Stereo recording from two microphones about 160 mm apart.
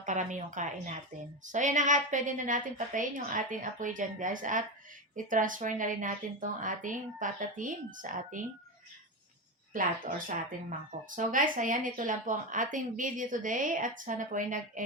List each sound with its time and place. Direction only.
0.0 s a woman's voice: 50° right (ahead or behind)
9.7 s speech: 60° right (ahead or behind)